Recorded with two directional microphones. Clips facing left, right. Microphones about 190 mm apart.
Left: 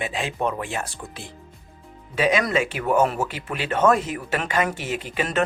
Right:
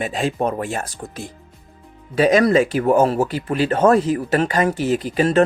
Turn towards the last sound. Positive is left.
turn(degrees=-35)  # may be behind; listen again after turning